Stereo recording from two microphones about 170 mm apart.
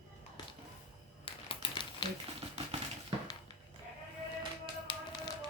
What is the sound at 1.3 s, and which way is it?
Crumpling, 30° left (ahead or behind).